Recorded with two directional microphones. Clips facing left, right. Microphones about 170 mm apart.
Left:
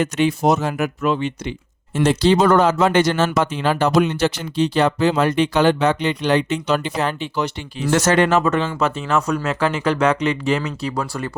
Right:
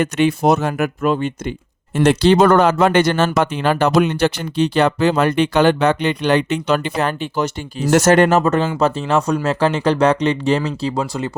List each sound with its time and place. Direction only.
0.0 s speech: 60° right (ahead or behind)
2.0 s speech: 65° right (ahead or behind); by 11.3 s 20° right (ahead or behind)